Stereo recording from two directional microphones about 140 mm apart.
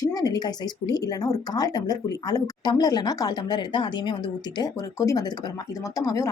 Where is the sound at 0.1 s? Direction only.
25° left (ahead or behind).